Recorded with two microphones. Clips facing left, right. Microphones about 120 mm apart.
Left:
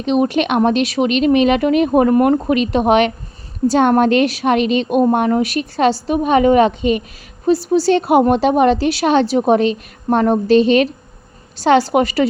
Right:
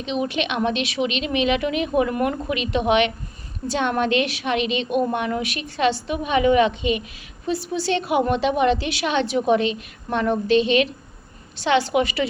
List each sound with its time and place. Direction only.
0.0 s a woman's voice: 45° left (ahead or behind)